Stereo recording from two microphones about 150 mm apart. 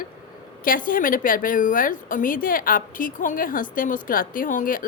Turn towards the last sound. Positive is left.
turn(degrees=65)  # may be behind; listen again after turning